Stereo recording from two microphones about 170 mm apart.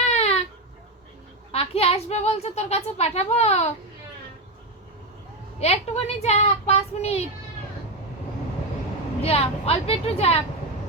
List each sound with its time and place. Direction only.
0.1 s baby cry: 40° left (ahead or behind)
1.5 s speech: 35° left (ahead or behind)
5.5 s speech: 40° left (ahead or behind)
9.2 s speech: 35° left (ahead or behind)